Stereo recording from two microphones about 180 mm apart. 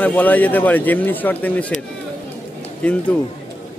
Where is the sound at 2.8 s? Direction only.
5° left (ahead or behind).